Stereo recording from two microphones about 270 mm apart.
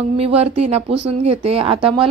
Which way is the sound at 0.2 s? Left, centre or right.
Right.